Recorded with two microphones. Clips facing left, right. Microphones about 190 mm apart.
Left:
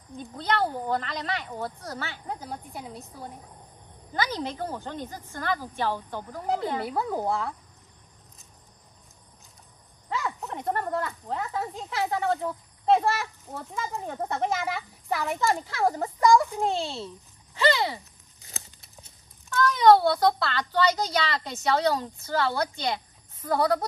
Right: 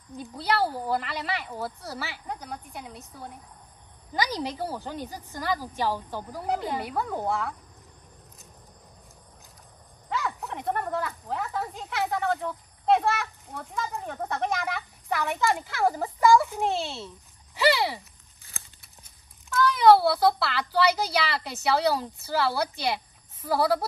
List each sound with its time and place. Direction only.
0.4 s a woman's voice: 5° right (ahead or behind)
4.1 s a woman's voice: 15° right (ahead or behind)
10.0 s speech: centre (ahead or behind)
14.0 s speech: 15° left (ahead or behind)
14.6 s speech: centre (ahead or behind)
17.6 s a sound: 5° right (ahead or behind)
19.5 s a woman's voice: 5° right (ahead or behind)